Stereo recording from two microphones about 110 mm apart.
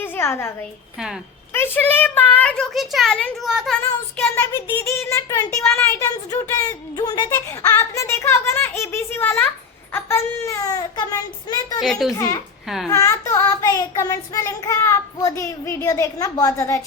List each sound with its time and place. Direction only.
0.0 s a sound: 20° left (ahead or behind)
1.5 s a woman's voice: 20° left (ahead or behind); by 3.8 s 5° right (ahead or behind)
4.5 s a child's voice: 25° left (ahead or behind)
5.7 s child singing: 25° left (ahead or behind); by 7.3 s 40° left (ahead or behind)
7.8 s a child's voice: 25° left (ahead or behind)
9.9 s child singing: 20° left (ahead or behind); by 11.8 s 40° left (ahead or behind)
11.8 s speech: centre (ahead or behind)
12.1 s child singing: 35° left (ahead or behind)
12.6 s a child's voice: 5° right (ahead or behind)
12.9 s child singing: 30° left (ahead or behind)